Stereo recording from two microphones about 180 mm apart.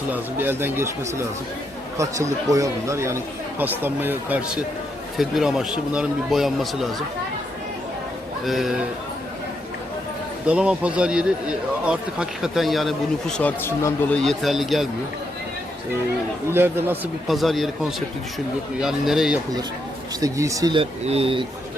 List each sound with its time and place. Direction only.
0.1 s speech: 10° right (ahead or behind)
8.4 s speech: centre (ahead or behind)
10.4 s speech: 5° right (ahead or behind); by 14.2 s 15° left (ahead or behind)
14.2 s speech: centre (ahead or behind)
16.5 s speech: 10° right (ahead or behind)
17.2 s speech: centre (ahead or behind)
20.2 s speech: 15° right (ahead or behind)
21.0 s speech: 35° right (ahead or behind)